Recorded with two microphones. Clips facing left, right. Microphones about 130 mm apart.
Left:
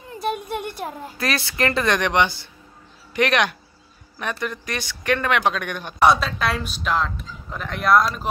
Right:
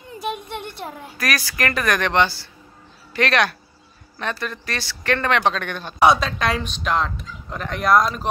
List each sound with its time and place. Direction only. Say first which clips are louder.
1.1 s speech: right 1 dB; 25° left (ahead or behind)
5.9 s speech: right 1 dB; centre (ahead or behind)